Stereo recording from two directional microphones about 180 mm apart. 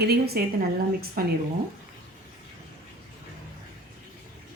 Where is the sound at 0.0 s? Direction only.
60° right (ahead or behind).